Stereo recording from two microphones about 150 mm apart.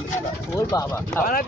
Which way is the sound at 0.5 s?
25° left (ahead or behind).